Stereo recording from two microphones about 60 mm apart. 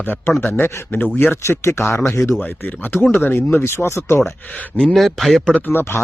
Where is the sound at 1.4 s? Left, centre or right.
Left.